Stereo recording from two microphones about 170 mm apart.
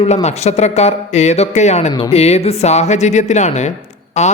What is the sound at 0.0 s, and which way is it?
Speech, 40° left (ahead or behind).